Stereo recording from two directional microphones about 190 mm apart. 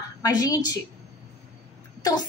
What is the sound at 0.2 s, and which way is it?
Speech, 20° left (ahead or behind).